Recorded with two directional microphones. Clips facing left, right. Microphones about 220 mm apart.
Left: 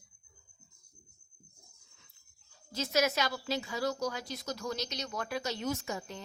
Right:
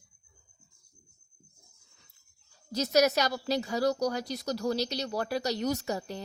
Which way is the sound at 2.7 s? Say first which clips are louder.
Right 6 dB; 40° right (ahead or behind).